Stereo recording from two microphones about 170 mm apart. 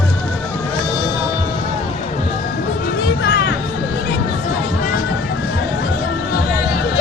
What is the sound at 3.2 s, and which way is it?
Music, 80° left.